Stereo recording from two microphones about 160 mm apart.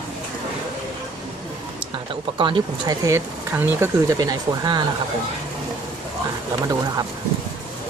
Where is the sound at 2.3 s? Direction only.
30° right (ahead or behind); by 3.9 s 15° right (ahead or behind).